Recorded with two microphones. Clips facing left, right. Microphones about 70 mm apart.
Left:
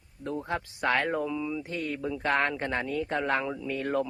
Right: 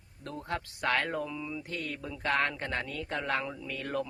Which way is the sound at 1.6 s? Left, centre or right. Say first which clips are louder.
Left 5 dB; left.